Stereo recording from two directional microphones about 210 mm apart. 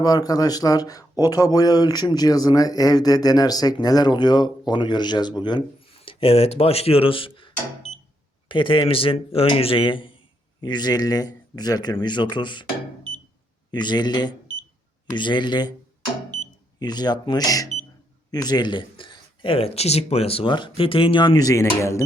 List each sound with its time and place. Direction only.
0.0 s speech: 20° left (ahead or behind)
13.7 s speech: 20° left (ahead or behind)
16.8 s speech: 20° left (ahead or behind)